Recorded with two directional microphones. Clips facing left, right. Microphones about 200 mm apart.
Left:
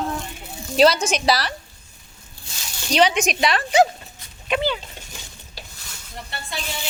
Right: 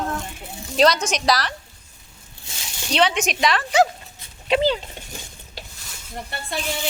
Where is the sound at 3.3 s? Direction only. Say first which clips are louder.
Left 1 dB; 35° left (ahead or behind).